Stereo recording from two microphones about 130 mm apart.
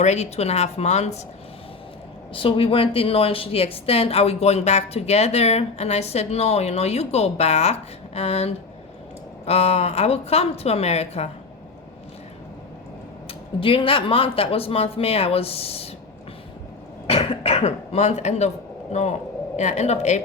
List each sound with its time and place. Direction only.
0.0 s a woman's voice: 60° left (ahead or behind)
2.3 s speech: 40° left (ahead or behind)
13.6 s speech: 45° left (ahead or behind)
17.1 s a woman's voice: 50° left (ahead or behind)